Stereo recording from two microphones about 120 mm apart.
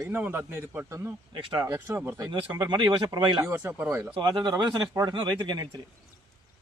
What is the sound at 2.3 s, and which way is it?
Speech, 40° right (ahead or behind).